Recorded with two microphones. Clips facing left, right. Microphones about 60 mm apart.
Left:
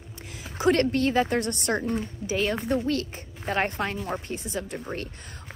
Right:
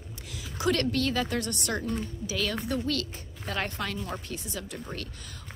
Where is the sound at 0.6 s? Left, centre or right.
Left.